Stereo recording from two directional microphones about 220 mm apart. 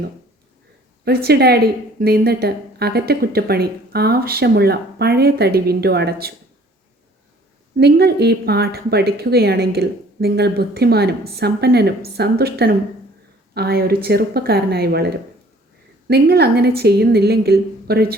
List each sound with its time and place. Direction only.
1.0 s a woman's voice: 45° right (ahead or behind)
7.8 s a woman's voice: 45° right (ahead or behind)